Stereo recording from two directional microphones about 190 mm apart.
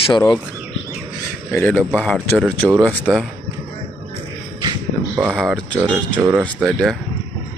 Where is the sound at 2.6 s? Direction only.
10° right (ahead or behind).